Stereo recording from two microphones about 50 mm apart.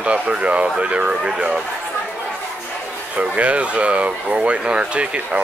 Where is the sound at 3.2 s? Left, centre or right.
Right.